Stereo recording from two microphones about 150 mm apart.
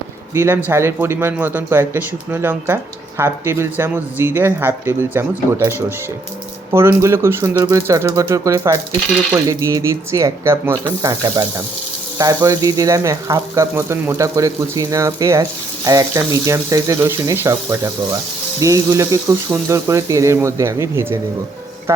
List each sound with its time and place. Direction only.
0.3 s speech: 15° right (ahead or behind)